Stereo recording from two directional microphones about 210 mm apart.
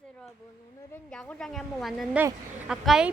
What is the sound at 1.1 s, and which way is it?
A woman's voice, centre (ahead or behind).